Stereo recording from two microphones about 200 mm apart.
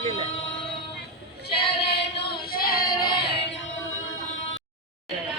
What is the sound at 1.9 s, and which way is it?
Female singing, 55° left (ahead or behind).